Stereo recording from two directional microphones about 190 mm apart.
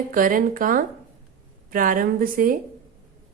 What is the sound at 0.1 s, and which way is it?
A woman's voice, 45° right (ahead or behind).